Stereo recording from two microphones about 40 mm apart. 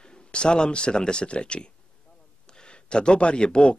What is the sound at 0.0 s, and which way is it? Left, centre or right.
A man's voice, left.